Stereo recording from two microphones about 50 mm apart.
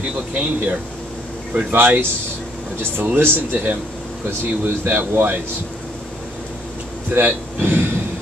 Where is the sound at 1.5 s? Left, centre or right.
Right.